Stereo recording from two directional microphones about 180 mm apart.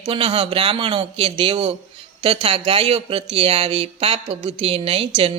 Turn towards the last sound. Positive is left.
turn(degrees=-30)  # may be behind; listen again after turning